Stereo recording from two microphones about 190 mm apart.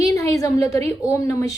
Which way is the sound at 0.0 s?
15° left (ahead or behind).